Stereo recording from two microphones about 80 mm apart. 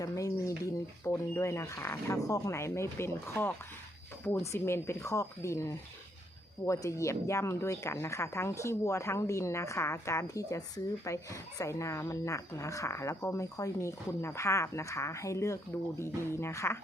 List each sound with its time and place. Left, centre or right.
0.0 s speech: left
4.4 s speech: left